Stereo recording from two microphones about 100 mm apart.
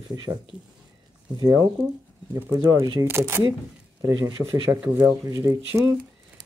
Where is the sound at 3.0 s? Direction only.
25° right (ahead or behind).